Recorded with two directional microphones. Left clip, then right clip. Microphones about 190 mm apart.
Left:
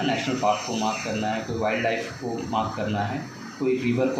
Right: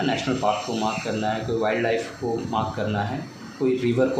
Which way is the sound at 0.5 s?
20° right (ahead or behind).